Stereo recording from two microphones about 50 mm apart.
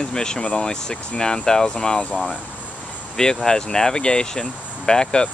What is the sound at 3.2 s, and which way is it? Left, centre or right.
Speech, centre.